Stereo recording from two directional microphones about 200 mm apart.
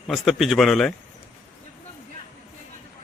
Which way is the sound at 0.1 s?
Centre (ahead or behind).